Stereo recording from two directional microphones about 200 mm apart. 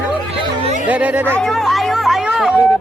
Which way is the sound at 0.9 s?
5° right (ahead or behind).